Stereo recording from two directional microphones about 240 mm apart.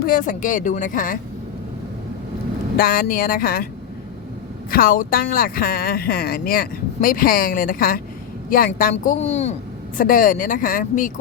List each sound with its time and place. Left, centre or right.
0.0 s speech: left
2.7 s speech: left
4.7 s speech: left